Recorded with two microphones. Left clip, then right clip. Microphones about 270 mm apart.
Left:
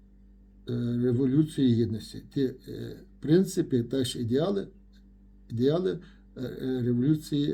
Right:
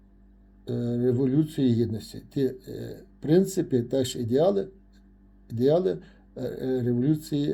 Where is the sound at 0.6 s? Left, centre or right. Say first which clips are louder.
Right 3 dB; centre.